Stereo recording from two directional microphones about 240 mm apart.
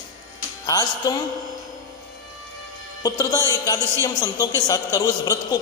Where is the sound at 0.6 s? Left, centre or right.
Centre.